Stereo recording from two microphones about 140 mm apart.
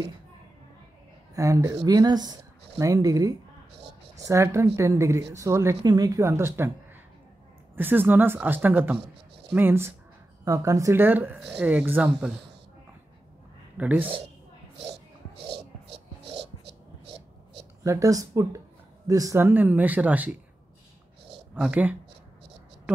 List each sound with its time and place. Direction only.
1.3 s a woman's voice: 25° right (ahead or behind); by 12.4 s 5° right (ahead or behind)
13.7 s speech: 10° right (ahead or behind)
17.8 s a woman's voice: 25° right (ahead or behind)
21.5 s speech: 10° right (ahead or behind)